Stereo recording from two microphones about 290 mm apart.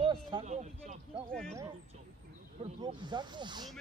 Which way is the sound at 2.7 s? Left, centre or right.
Centre.